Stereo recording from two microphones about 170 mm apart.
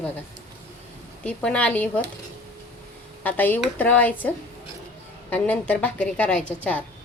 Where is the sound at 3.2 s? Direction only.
10° left (ahead or behind).